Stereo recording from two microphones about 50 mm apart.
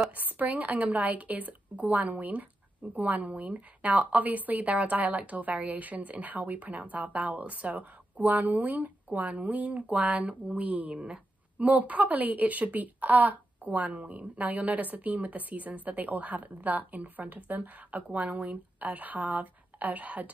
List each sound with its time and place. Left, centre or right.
0.1 s a woman's voice: right